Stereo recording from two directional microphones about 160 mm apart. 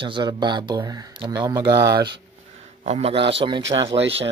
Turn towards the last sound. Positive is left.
turn(degrees=-30)  # may be behind; listen again after turning